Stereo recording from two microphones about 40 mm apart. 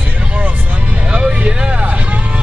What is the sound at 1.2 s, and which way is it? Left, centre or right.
Vehicle, right.